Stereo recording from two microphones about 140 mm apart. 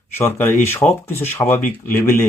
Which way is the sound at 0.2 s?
15° left (ahead or behind).